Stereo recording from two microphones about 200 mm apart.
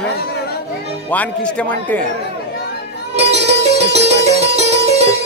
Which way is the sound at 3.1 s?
30° right (ahead or behind).